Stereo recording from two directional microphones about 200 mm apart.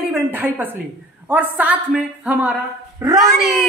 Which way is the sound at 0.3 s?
10° right (ahead or behind).